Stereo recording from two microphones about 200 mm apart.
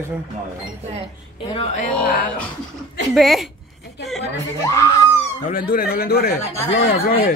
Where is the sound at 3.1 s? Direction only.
Centre (ahead or behind).